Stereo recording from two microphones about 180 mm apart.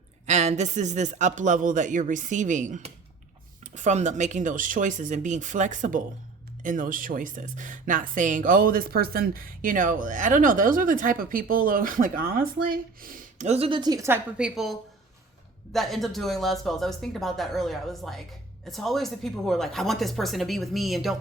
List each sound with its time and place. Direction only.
0.3 s speech: 40° right (ahead or behind); by 14.2 s 15° right (ahead or behind)
14.3 s speech: 5° right (ahead or behind)